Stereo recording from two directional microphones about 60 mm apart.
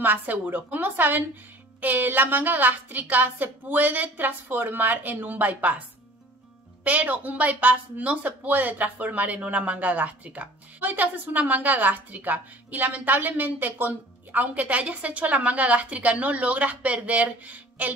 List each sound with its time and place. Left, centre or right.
0.0 s speech: right